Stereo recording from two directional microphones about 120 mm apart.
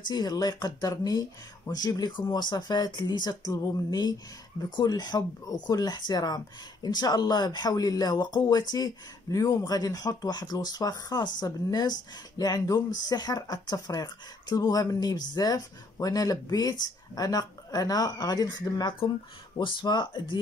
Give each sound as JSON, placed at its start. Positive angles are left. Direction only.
{"t": 0.0, "sound": "speech", "side_deg": 35}